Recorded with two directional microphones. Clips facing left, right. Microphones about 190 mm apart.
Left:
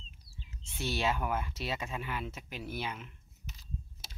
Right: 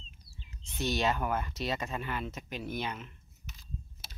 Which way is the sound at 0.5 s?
10° left (ahead or behind).